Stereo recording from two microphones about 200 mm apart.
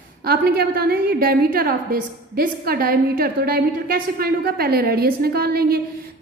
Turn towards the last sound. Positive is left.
turn(degrees=-50)  # may be behind; listen again after turning